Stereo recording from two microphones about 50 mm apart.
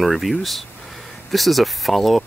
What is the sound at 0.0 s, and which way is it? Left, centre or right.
Speech, centre.